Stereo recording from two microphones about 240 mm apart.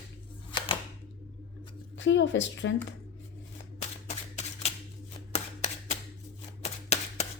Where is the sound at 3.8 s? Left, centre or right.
Left.